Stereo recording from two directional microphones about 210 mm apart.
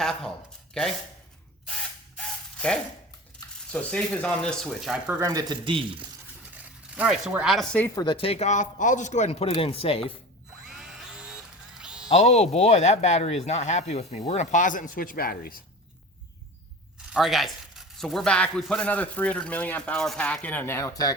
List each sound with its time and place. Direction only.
0.0 s speech: centre (ahead or behind)
2.1 s mechanisms: 5° left (ahead or behind)
3.7 s speech: 5° left (ahead or behind)
5.2 s a man's voice: 15° right (ahead or behind)
6.5 s speech: 5° right (ahead or behind)
7.9 s speech: 25° left (ahead or behind)
10.7 s drill: centre (ahead or behind)
11.8 s music: 5° right (ahead or behind)
12.0 s speech: 30° left (ahead or behind); by 15.6 s 45° left (ahead or behind)
17.1 s speech: centre (ahead or behind); by 21.2 s 15° left (ahead or behind)